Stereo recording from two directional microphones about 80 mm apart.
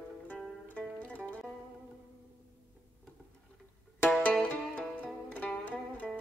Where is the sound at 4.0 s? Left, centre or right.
Centre.